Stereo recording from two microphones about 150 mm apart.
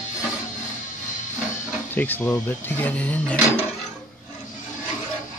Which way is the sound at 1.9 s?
10° left (ahead or behind).